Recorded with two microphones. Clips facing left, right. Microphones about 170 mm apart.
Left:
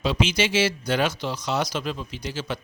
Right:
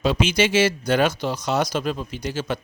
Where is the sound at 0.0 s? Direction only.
50° right (ahead or behind).